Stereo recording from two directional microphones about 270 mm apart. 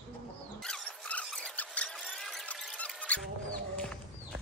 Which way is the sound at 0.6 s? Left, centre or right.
Centre.